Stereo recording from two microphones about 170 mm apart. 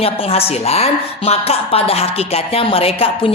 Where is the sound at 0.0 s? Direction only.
35° left (ahead or behind).